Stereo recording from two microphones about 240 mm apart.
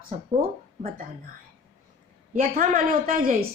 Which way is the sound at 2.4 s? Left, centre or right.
Right.